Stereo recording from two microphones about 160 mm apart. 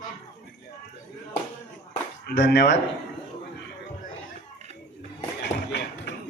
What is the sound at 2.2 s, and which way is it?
Speech, 90° left.